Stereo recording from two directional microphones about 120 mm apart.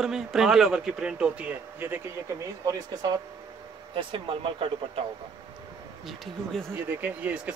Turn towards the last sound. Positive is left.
turn(degrees=-10)  # may be behind; listen again after turning